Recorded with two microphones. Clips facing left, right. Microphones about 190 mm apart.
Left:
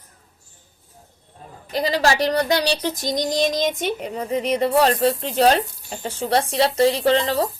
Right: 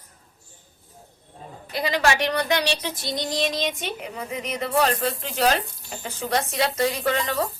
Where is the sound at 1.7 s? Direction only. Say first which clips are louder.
Left 3 dB; 40° left (ahead or behind).